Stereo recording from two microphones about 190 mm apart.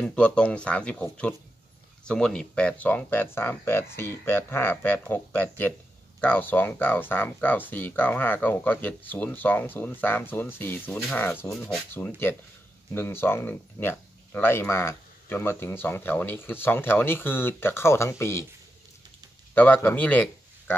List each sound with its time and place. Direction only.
0.0 s speech: 5° left (ahead or behind)
19.5 s speech: 10° left (ahead or behind)